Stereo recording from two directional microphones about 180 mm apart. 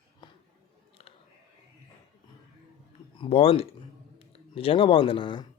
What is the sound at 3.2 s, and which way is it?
Speech, 35° left (ahead or behind).